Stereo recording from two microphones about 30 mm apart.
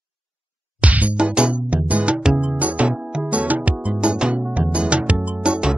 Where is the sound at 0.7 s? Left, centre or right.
Right.